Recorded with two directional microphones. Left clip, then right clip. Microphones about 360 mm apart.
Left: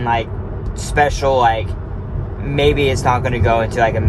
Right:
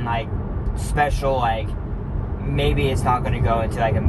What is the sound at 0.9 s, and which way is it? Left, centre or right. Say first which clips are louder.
Speech: left 6 dB; left.